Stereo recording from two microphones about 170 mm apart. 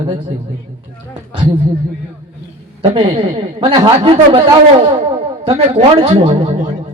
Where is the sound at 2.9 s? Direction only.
35° right (ahead or behind).